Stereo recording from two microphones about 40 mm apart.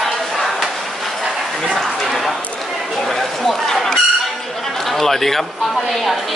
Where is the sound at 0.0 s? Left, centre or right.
Centre.